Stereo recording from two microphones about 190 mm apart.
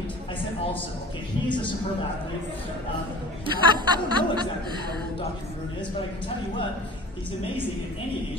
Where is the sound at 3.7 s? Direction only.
25° right (ahead or behind).